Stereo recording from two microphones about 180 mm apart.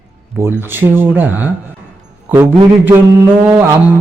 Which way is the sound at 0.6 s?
10° right (ahead or behind).